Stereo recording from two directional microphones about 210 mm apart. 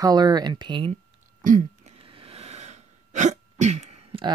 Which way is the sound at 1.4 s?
40° right (ahead or behind).